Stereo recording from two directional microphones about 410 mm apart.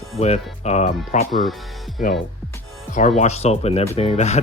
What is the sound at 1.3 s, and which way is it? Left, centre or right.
Speech, centre.